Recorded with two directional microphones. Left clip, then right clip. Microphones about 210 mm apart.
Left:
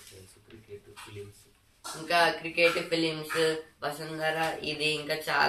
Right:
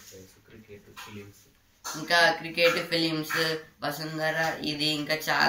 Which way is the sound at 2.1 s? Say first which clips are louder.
Right 3 dB; centre (ahead or behind).